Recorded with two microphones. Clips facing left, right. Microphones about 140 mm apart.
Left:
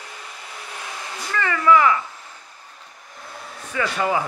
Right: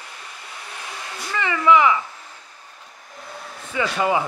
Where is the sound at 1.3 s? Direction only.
15° right (ahead or behind).